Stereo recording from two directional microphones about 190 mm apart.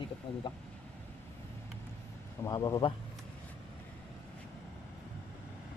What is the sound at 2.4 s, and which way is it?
Speech, 20° left (ahead or behind).